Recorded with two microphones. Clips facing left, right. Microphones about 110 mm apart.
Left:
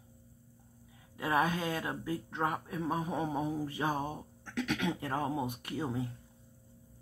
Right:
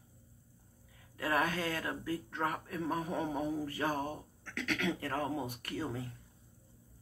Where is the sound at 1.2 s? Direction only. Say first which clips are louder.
Left 2 dB; 20° left (ahead or behind).